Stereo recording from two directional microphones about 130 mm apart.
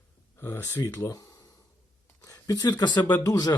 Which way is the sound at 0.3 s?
15° left (ahead or behind).